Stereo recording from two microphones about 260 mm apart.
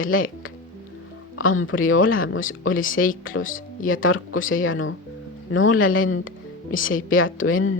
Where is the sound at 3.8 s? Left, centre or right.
Left.